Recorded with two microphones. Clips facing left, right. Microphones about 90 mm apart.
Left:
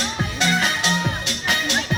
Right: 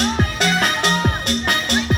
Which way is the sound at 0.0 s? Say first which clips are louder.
Right 4 dB; 55° right (ahead or behind).